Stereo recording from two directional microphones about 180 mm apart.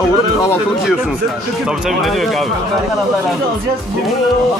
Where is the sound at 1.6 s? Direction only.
Centre (ahead or behind).